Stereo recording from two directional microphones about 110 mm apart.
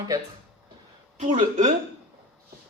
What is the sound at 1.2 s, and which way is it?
Speech, 90° right.